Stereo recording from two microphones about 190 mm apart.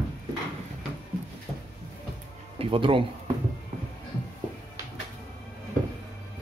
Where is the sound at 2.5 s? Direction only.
25° right (ahead or behind).